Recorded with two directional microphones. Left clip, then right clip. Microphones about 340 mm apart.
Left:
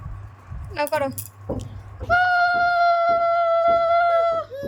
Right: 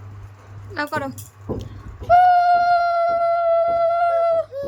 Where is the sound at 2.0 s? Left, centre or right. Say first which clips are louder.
Right 5 dB; centre.